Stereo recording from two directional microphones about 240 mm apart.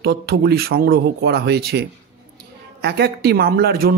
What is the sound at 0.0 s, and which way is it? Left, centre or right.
A man's voice, right.